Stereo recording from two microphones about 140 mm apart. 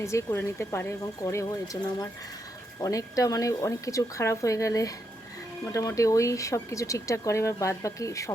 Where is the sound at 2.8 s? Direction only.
25° left (ahead or behind).